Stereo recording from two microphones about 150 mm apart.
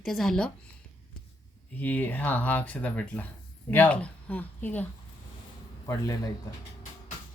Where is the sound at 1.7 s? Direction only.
10° left (ahead or behind).